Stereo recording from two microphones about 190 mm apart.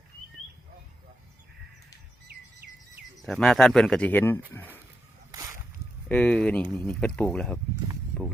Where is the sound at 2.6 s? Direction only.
60° right (ahead or behind).